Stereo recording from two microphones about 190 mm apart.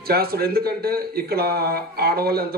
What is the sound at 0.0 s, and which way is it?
Speech, 55° right (ahead or behind).